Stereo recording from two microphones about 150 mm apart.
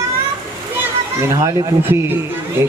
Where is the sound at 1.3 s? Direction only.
20° right (ahead or behind).